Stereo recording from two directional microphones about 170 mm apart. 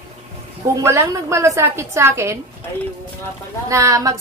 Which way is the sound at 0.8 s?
15° right (ahead or behind).